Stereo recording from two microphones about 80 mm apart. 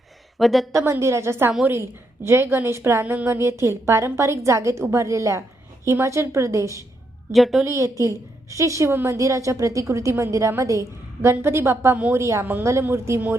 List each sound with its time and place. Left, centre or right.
0.3 s a woman's voice: centre
0.7 s a woman's voice: right
7.3 s a woman's voice: centre
7.6 s a woman's voice: right